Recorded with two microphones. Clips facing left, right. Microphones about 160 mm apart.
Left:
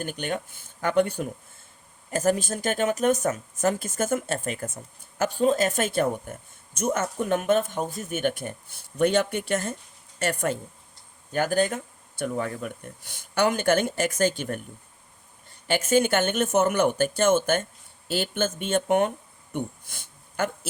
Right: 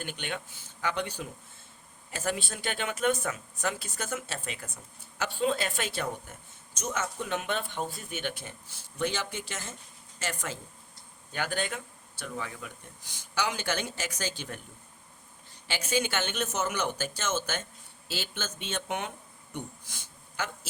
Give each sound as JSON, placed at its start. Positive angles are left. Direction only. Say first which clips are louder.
{"t": 0.0, "sound": "speech", "louder": "left 7 dB", "side_deg": 45}
{"t": 11.3, "sound": "speech", "louder": "left 9 dB", "side_deg": 45}
{"t": 15.6, "sound": "speech", "louder": "left 9 dB", "side_deg": 50}